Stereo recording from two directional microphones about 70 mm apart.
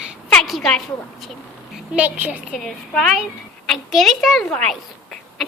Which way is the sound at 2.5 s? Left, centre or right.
Centre.